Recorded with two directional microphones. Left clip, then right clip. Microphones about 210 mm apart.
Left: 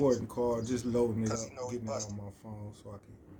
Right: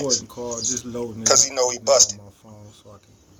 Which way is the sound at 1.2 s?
45° right (ahead or behind).